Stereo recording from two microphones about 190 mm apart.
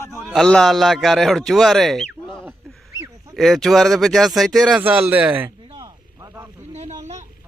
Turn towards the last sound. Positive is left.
turn(degrees=-35)  # may be behind; listen again after turning